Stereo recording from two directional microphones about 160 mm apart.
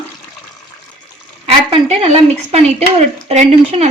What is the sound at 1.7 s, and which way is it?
Speech, 40° right (ahead or behind).